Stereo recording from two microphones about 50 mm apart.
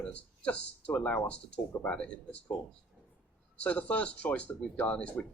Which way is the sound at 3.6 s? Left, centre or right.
Left.